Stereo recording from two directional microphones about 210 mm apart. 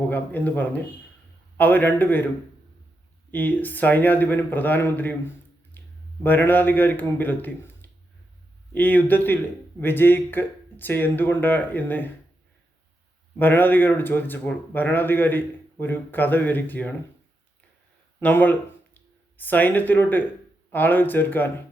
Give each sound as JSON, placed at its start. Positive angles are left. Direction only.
{"t": 0.1, "sound": "speech", "side_deg": 10}
{"t": 3.3, "sound": "speech", "side_deg": 10}
{"t": 5.8, "sound": "a sound", "side_deg": 10}
{"t": 6.2, "sound": "speech", "side_deg": 10}
{"t": 13.4, "sound": "speech", "side_deg": 10}
{"t": 18.2, "sound": "speech", "side_deg": 10}